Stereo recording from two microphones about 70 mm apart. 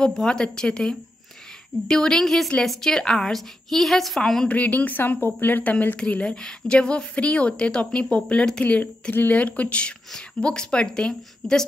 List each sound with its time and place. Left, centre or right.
0.0 s a woman's voice: centre
4.5 s a woman's voice: left